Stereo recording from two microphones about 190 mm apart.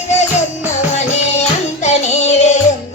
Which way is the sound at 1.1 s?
35° left (ahead or behind).